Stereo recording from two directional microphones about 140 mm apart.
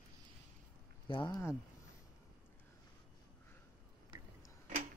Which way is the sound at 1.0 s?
35° left (ahead or behind).